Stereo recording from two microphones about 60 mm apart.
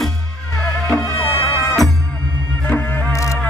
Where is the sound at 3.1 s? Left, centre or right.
Left.